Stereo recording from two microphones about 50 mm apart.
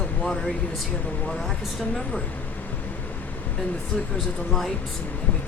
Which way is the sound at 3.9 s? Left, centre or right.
Centre.